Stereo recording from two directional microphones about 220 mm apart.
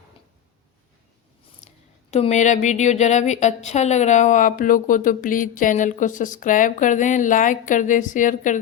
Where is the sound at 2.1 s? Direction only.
30° left (ahead or behind).